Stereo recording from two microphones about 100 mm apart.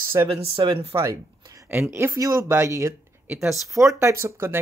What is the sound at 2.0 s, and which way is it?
Speech, 30° right (ahead or behind).